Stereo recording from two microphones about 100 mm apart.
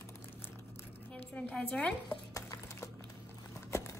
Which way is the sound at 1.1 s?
15° left (ahead or behind).